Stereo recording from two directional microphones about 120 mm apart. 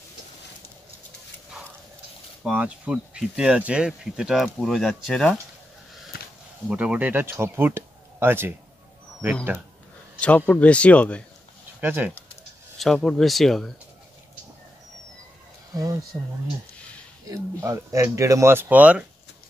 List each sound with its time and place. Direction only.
2.4 s speech: 10° right (ahead or behind)
6.7 s speech: 10° right (ahead or behind)
10.2 s speech: 10° left (ahead or behind)
11.8 s speech: 15° right (ahead or behind)
12.7 s speech: centre (ahead or behind)
15.7 s speech: 30° right (ahead or behind)
17.3 s speech: 25° right (ahead or behind)